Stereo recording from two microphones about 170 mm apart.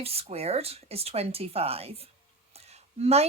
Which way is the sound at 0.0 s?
35° right (ahead or behind).